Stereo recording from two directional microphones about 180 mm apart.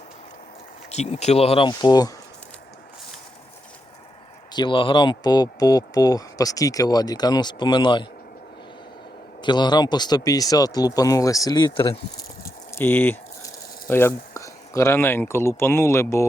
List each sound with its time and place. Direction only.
0.9 s speech: 35° left (ahead or behind); by 2.1 s 20° left (ahead or behind)
4.5 s speech: 25° left (ahead or behind)
9.4 s speech: 25° left (ahead or behind)
12.4 s a sound: 15° left (ahead or behind)